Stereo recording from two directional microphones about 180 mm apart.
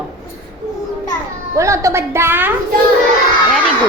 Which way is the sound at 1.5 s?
15° right (ahead or behind).